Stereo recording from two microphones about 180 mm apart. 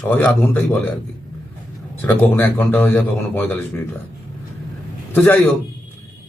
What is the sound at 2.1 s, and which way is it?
A man's voice, 10° left (ahead or behind).